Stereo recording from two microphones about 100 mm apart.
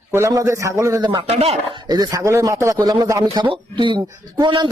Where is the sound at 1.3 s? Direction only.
90° right.